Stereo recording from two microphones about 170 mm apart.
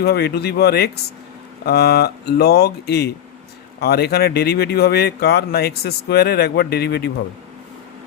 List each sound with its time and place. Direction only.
0.0 s speech: 70° left (ahead or behind)